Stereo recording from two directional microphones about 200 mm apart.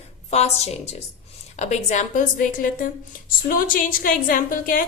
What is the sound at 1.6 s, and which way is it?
Speech, 35° left (ahead or behind).